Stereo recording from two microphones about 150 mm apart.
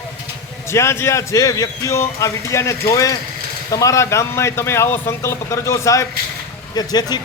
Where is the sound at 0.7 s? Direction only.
15° left (ahead or behind).